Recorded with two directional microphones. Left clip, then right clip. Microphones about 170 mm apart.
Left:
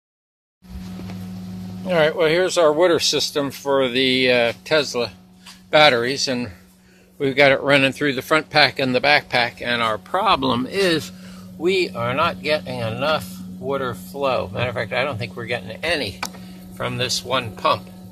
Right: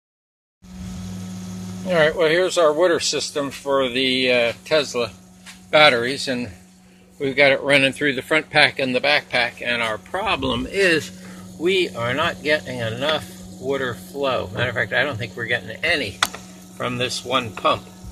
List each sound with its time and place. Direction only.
1.9 s speech: 5° left (ahead or behind)
8.8 s speech: 25° left (ahead or behind)
10.7 s speech: 10° left (ahead or behind)
11.6 s speech: centre (ahead or behind)